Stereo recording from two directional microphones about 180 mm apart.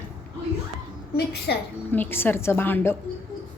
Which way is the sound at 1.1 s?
65° left (ahead or behind).